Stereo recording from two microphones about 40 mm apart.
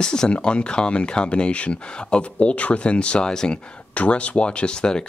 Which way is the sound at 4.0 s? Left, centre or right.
Left.